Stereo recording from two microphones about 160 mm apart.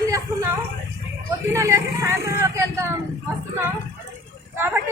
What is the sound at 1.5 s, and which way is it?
Speech, 15° right (ahead or behind).